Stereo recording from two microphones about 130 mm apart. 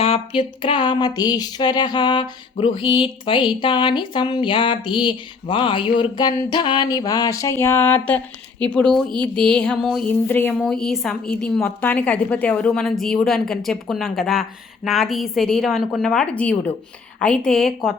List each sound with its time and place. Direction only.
0.0 s speech: 45° left (ahead or behind)
6.0 s a sound: 35° left (ahead or behind); by 8.2 s 10° left (ahead or behind)
8.6 s a woman's voice: 5° left (ahead or behind)
10.1 s a woman's voice: 15° left (ahead or behind)
10.5 s a woman's voice: 5° left (ahead or behind)